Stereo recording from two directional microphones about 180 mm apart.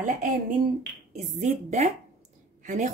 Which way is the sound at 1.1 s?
40° right (ahead or behind).